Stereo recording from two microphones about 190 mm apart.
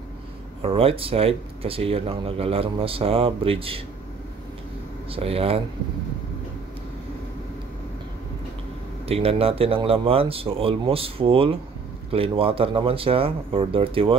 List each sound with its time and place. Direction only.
0.6 s speech: 30° right (ahead or behind)
5.1 s speech: 30° right (ahead or behind)
9.0 s speech: 30° right (ahead or behind)